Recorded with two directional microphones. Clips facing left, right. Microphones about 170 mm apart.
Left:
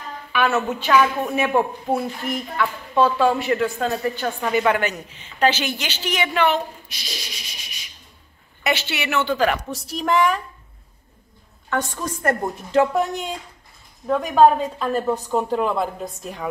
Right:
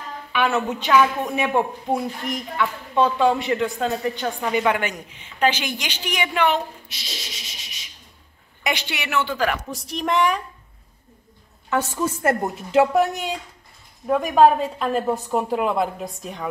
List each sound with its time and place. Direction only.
0.3 s a woman's voice: 15° right (ahead or behind)
2.6 s a woman's voice: 20° right (ahead or behind)
9.1 s a woman's voice: centre (ahead or behind)
11.7 s a woman's voice: 5° right (ahead or behind)